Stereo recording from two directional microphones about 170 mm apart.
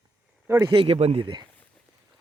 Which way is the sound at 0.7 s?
35° right (ahead or behind).